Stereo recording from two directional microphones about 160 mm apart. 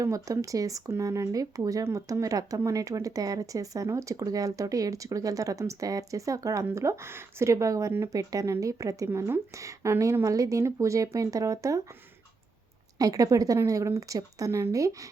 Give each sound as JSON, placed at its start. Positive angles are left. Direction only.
{"t": 0.0, "sound": "speech", "side_deg": -20}
{"t": 13.0, "sound": "speech", "side_deg": -20}